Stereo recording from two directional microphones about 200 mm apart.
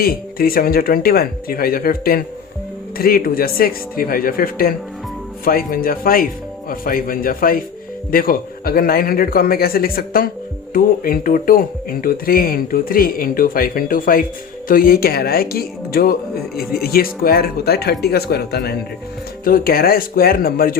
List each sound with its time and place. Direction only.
0.0 s speech: 50° left (ahead or behind)